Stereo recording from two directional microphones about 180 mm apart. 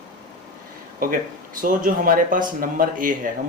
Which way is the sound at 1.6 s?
50° right (ahead or behind).